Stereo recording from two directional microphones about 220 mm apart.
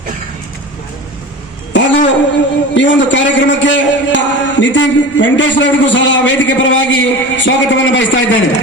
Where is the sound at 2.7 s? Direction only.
55° left (ahead or behind).